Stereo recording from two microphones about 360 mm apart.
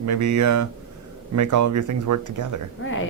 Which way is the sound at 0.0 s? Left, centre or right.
Right.